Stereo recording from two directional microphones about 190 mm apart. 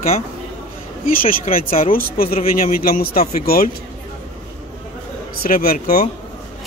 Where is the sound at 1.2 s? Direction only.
45° left (ahead or behind).